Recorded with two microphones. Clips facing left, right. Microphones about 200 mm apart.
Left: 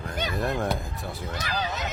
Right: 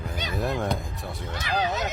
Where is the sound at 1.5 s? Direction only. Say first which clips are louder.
Right 6 dB; 40° right (ahead or behind).